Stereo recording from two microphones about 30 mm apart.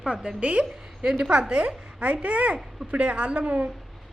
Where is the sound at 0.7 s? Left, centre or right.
Right.